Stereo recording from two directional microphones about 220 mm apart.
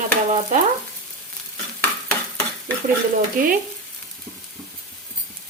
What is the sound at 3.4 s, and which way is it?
Speech, 40° right (ahead or behind).